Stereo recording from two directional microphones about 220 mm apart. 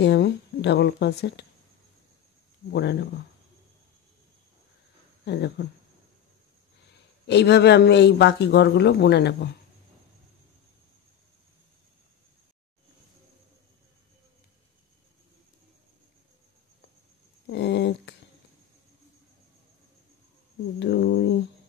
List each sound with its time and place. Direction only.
0.0 s a man's voice: 50° left (ahead or behind)
2.7 s a man's voice: 50° left (ahead or behind)
5.2 s speech: 50° left (ahead or behind)
7.2 s a man's voice: 50° left (ahead or behind)
17.5 s a sound: 50° left (ahead or behind)
20.8 s a man's voice: 50° left (ahead or behind)